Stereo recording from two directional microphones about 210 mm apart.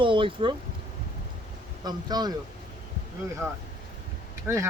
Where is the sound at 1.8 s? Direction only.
20° right (ahead or behind).